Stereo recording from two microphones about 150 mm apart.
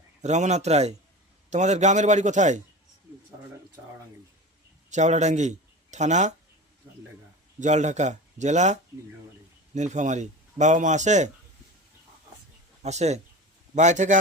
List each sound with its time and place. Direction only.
0.2 s speech: 50° right (ahead or behind)
4.9 s a man's voice: 50° right (ahead or behind)
7.6 s speech: 50° right (ahead or behind)
12.8 s speech: 50° right (ahead or behind)